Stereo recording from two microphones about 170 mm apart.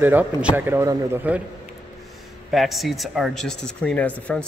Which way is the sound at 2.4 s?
Centre (ahead or behind).